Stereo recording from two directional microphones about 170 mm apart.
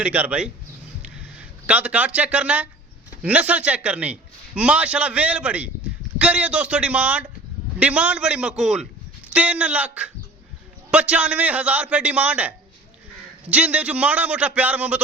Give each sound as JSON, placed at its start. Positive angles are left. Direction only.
{"t": 0.0, "sound": "a man's voice", "side_deg": -10}
{"t": 1.6, "sound": "a man's voice", "side_deg": -5}